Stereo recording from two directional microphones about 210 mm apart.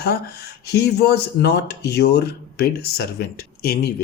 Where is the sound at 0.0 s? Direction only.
50° left (ahead or behind).